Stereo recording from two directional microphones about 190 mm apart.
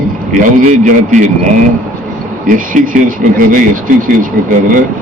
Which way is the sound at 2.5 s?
45° right (ahead or behind).